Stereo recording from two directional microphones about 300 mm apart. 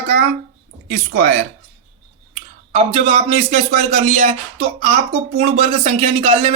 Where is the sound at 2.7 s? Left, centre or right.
Right.